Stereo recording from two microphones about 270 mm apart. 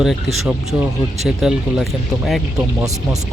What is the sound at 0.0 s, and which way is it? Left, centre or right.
Speech, centre.